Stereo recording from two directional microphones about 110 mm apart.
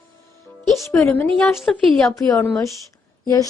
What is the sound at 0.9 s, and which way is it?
Speech, 25° left (ahead or behind).